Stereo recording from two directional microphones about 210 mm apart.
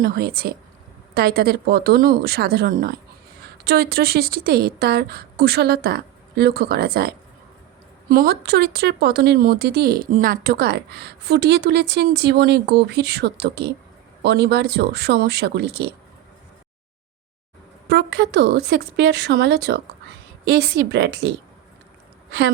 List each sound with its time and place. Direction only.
0.0 s speech: 45° right (ahead or behind)
8.1 s speech: 45° right (ahead or behind)
17.8 s speech: 50° right (ahead or behind)